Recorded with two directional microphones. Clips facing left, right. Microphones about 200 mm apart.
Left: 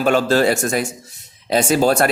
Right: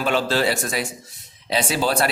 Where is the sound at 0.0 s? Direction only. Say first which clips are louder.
Left 5 dB; 45° left (ahead or behind).